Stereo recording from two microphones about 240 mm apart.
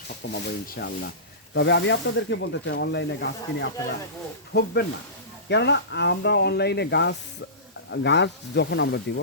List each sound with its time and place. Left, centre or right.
0.1 s speech: left